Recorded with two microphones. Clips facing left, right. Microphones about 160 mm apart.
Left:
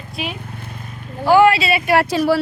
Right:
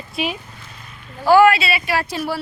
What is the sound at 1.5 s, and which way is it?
Speech, 35° left (ahead or behind).